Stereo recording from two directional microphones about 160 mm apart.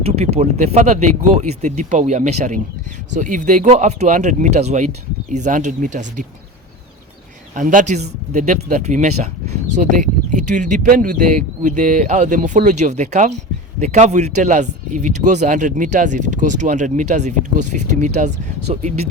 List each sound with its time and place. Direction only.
0.0 s speech: 45° right (ahead or behind)
7.5 s speech: 55° right (ahead or behind)